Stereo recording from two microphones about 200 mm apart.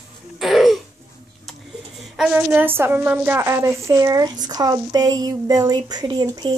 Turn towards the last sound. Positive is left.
turn(degrees=-20)  # may be behind; listen again after turning